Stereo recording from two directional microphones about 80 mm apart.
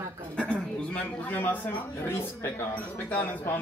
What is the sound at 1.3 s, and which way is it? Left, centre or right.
A man's voice, left.